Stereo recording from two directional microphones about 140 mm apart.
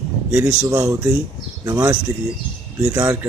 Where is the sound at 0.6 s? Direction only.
25° right (ahead or behind).